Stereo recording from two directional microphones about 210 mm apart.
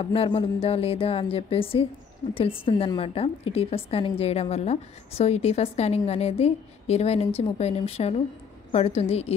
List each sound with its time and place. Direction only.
0.0 s a woman's voice: 25° left (ahead or behind)